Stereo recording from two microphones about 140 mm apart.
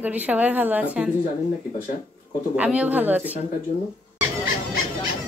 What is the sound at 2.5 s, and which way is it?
Speech, 10° right (ahead or behind).